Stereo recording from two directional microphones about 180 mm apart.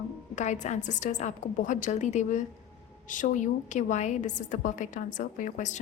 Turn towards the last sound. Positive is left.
turn(degrees=45)  # may be behind; listen again after turning